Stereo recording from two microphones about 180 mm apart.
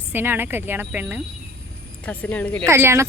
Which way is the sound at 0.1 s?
10° right (ahead or behind).